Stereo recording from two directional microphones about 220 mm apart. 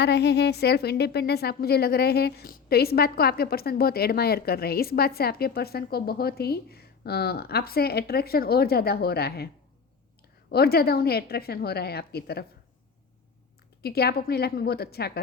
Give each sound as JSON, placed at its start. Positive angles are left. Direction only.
{"t": 0.0, "sound": "a woman's voice", "side_deg": 50}
{"t": 10.5, "sound": "a woman's voice", "side_deg": 45}
{"t": 13.8, "sound": "a woman's voice", "side_deg": 45}